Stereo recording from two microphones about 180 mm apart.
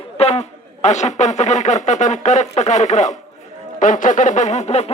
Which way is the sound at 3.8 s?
45° left (ahead or behind).